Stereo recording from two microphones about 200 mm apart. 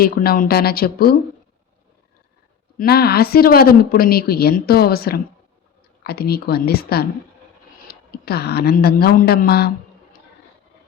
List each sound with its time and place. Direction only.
0.0 s speech: 50° left (ahead or behind)
2.7 s a woman's voice: 50° left (ahead or behind)